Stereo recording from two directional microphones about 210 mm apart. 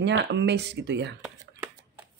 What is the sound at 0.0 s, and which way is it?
Speech, 55° right (ahead or behind).